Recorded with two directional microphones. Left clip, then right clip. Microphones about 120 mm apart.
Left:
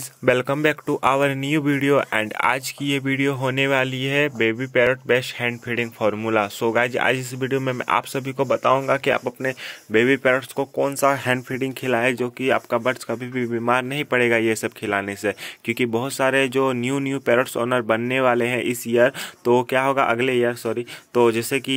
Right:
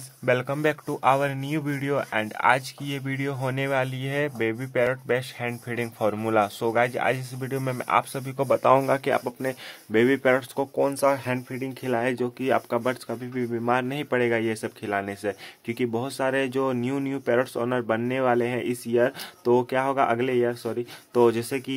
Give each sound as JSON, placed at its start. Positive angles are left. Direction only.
{"t": 0.2, "sound": "speech", "side_deg": 40}
{"t": 0.6, "sound": "speech", "side_deg": 15}
{"t": 1.0, "sound": "speech", "side_deg": 30}
{"t": 8.5, "sound": "speech", "side_deg": -5}
{"t": 8.9, "sound": "speech", "side_deg": 15}
{"t": 11.2, "sound": "speech", "side_deg": 40}
{"t": 11.8, "sound": "speech", "side_deg": 25}
{"t": 13.1, "sound": "speech", "side_deg": 30}
{"t": 13.8, "sound": "speech", "side_deg": 10}
{"t": 14.2, "sound": "speech", "side_deg": 25}